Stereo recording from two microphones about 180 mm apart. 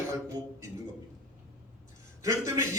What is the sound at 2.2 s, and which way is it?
Speech, 15° right (ahead or behind).